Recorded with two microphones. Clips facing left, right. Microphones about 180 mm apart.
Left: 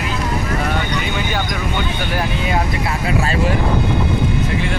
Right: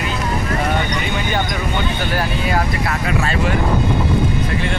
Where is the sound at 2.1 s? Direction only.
20° left (ahead or behind).